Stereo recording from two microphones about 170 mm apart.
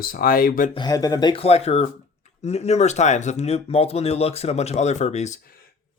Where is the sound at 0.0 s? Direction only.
60° left (ahead or behind).